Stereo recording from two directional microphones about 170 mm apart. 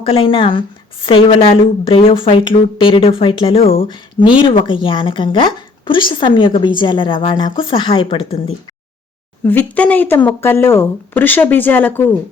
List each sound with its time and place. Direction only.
0.0 s speech: 30° left (ahead or behind)
9.4 s speech: 10° left (ahead or behind)